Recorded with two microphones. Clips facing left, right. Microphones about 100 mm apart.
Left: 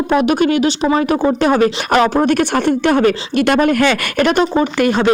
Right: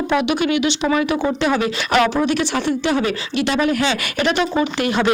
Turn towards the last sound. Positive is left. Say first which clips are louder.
# left 4 dB
turn(degrees=40)  # may be behind; listen again after turning